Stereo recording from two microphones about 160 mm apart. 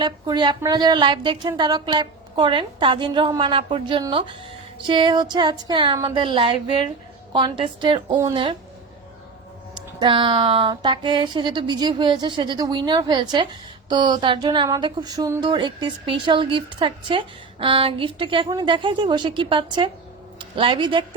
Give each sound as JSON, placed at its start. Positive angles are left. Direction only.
{"t": 0.0, "sound": "speech", "side_deg": -30}
{"t": 9.7, "sound": "speech", "side_deg": -30}